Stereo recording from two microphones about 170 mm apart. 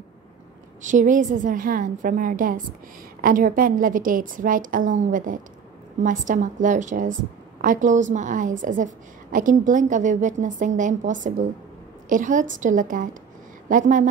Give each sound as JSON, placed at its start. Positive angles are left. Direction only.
{"t": 0.8, "sound": "a woman's voice", "side_deg": -50}